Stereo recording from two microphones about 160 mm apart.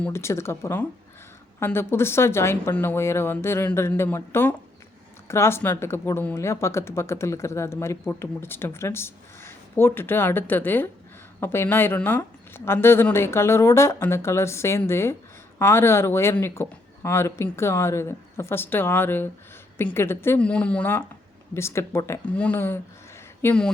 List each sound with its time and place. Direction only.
0.0 s a woman's voice: 15° left (ahead or behind)